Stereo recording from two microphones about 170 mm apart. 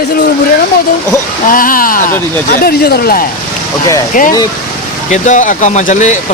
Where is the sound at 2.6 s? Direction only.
65° left (ahead or behind).